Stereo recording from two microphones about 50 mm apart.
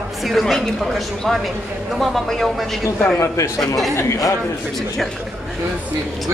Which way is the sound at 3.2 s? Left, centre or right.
Left.